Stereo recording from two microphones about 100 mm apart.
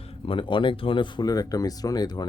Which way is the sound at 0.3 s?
55° left (ahead or behind).